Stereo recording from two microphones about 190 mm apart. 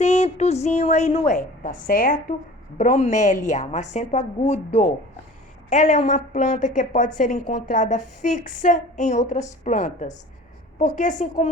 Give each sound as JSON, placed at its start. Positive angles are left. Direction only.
{"t": 0.0, "sound": "a woman's voice", "side_deg": 35}